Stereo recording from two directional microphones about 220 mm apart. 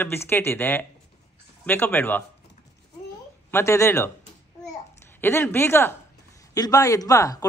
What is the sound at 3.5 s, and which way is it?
Speech, 15° left (ahead or behind).